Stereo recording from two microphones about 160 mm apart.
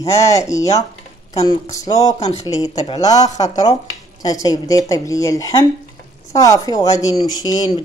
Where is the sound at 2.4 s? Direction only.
25° left (ahead or behind).